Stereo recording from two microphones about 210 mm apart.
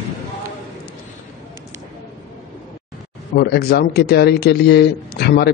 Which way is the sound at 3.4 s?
50° left (ahead or behind).